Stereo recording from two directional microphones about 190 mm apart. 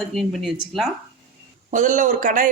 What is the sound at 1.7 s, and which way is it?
Speech, 40° right (ahead or behind).